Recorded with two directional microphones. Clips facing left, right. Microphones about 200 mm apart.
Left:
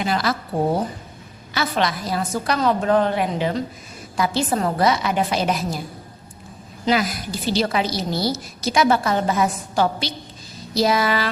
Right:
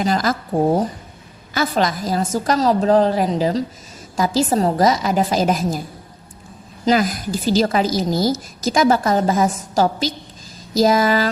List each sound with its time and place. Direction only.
0.0 s a woman's voice: 40° right (ahead or behind)
6.8 s a woman's voice: 45° right (ahead or behind)